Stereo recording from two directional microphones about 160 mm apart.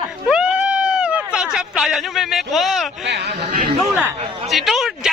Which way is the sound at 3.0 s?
90° right.